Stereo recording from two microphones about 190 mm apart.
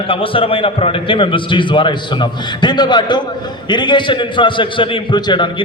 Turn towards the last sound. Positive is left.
turn(degrees=25)  # may be behind; listen again after turning